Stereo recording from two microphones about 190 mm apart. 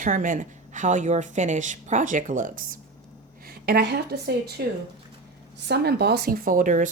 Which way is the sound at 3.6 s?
60° right (ahead or behind).